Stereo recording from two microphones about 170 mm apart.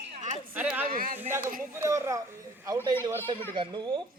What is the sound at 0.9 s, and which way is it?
Speech, 55° right (ahead or behind).